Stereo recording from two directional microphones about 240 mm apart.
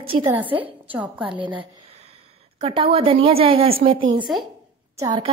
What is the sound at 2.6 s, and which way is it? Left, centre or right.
A woman's voice, right.